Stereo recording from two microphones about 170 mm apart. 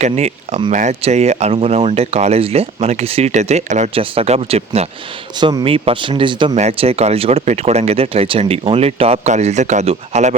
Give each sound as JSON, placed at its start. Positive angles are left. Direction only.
{"t": 0.0, "sound": "speech", "side_deg": -40}
{"t": 5.4, "sound": "speech", "side_deg": -25}